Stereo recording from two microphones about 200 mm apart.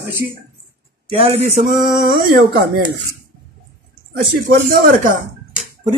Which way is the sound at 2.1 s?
50° right (ahead or behind).